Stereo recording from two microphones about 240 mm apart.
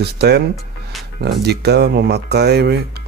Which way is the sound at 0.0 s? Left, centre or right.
Right.